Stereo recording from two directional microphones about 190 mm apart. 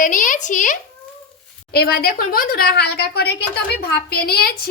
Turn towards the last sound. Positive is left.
turn(degrees=55)  # may be behind; listen again after turning